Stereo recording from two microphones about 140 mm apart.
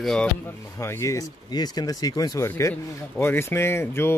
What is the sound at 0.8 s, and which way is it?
Speech, 20° left (ahead or behind).